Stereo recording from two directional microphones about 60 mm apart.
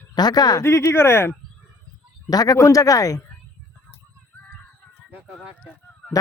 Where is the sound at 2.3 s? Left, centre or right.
Left.